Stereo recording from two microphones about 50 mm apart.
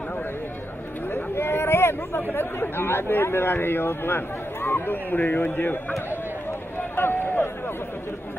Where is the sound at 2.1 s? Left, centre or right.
Left.